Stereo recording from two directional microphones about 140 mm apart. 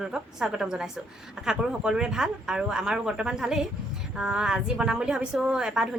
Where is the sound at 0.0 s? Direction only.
5° right (ahead or behind).